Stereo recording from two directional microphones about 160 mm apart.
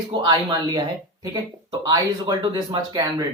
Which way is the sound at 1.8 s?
25° right (ahead or behind).